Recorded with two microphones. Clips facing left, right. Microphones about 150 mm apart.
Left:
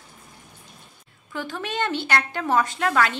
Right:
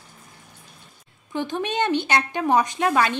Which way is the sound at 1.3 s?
20° right (ahead or behind).